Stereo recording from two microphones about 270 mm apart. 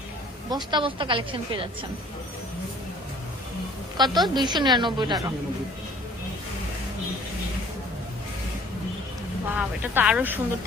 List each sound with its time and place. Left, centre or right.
0.5 s speech: centre
3.9 s a woman's voice: centre
9.5 s a woman's voice: centre